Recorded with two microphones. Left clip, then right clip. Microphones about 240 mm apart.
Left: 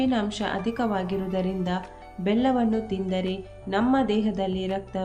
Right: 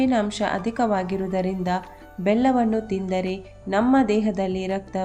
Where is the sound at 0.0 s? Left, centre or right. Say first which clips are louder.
Right 4 dB; right.